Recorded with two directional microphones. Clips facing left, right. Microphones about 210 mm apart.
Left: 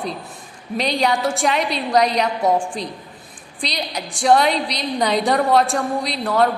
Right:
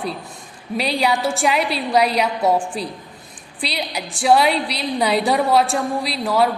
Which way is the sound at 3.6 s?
5° right (ahead or behind).